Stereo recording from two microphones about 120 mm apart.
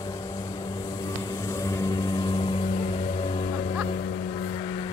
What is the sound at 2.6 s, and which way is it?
Vehicle, 55° left (ahead or behind).